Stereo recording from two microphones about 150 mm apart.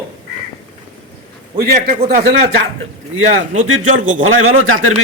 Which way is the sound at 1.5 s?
75° right (ahead or behind).